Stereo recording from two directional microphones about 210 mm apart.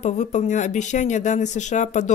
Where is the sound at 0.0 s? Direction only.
35° left (ahead or behind).